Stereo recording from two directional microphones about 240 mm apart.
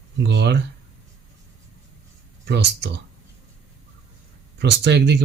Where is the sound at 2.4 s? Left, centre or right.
Right.